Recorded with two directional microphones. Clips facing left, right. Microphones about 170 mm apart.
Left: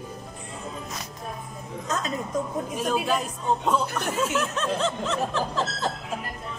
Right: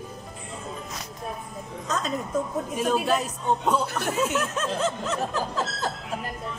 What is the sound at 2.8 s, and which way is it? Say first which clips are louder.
Speech: right 2 dB; centre (ahead or behind).